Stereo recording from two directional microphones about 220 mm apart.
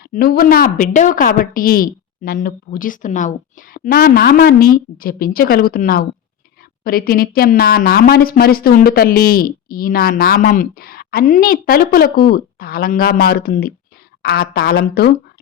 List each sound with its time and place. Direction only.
0.1 s a woman's voice: 40° left (ahead or behind)